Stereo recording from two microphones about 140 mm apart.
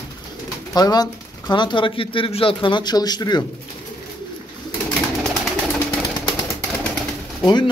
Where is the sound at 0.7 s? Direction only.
30° left (ahead or behind).